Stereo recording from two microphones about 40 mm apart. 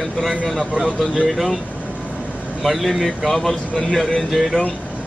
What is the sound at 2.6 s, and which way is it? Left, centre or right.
Speech, centre.